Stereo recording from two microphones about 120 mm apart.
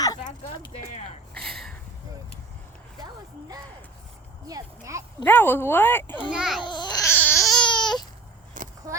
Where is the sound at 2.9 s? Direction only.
35° right (ahead or behind).